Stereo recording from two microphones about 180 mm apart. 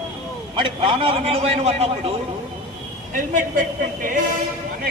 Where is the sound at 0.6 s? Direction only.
30° right (ahead or behind).